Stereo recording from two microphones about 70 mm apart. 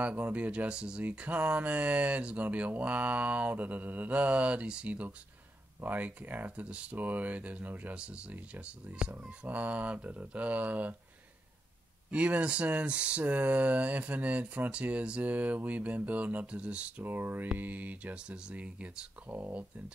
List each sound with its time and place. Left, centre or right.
0.0 s speech: centre
12.1 s speech: centre